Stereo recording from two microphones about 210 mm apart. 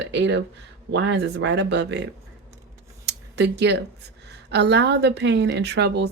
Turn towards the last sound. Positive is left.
turn(degrees=-55)  # may be behind; listen again after turning